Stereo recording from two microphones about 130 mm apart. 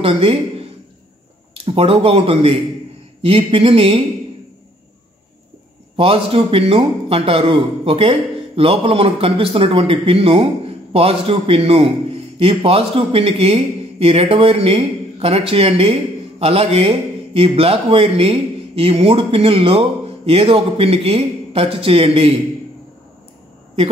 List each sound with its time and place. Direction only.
0.0 s a man's voice: 45° right (ahead or behind)
5.9 s a man's voice: 45° right (ahead or behind)